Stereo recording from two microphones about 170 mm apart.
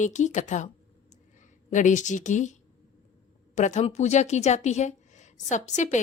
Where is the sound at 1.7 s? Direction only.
45° left (ahead or behind).